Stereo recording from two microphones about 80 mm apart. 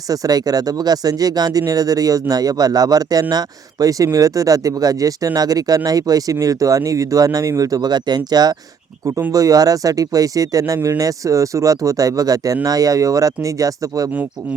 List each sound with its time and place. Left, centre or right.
0.1 s speech: right